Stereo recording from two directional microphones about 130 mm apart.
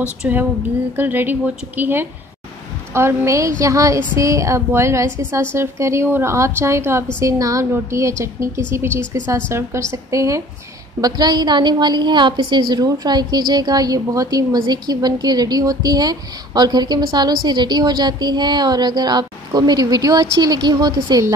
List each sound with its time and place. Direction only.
0.2 s a woman's voice: 15° right (ahead or behind); by 21.3 s 30° right (ahead or behind)